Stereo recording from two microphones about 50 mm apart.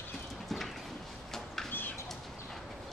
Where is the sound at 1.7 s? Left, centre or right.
Left.